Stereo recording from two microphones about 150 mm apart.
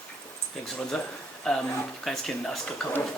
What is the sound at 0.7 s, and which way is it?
Speech, 5° left (ahead or behind).